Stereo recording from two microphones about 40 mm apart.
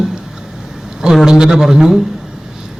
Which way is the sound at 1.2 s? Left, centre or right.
Centre.